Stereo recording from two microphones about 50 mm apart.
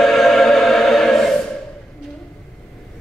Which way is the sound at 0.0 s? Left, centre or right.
Centre.